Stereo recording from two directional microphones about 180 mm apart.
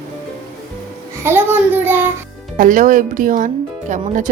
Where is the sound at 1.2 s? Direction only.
10° right (ahead or behind).